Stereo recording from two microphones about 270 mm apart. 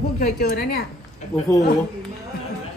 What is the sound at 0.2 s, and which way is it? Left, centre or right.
Speech, left.